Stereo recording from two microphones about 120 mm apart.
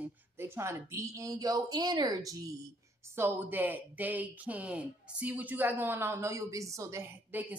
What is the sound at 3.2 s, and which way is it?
A woman's voice, 15° right (ahead or behind).